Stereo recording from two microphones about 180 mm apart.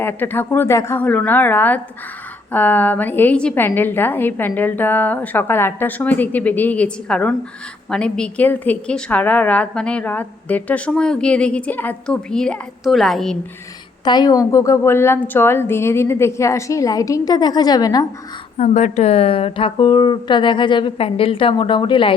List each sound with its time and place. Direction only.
0.0 s a woman's voice: 10° left (ahead or behind)
14.0 s a woman's voice: 25° left (ahead or behind)
18.5 s a woman's voice: 40° left (ahead or behind)